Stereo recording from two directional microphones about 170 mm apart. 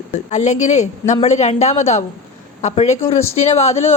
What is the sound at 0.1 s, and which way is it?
A woman's voice, 40° left (ahead or behind).